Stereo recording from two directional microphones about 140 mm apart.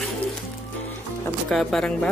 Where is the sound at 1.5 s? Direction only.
Centre (ahead or behind).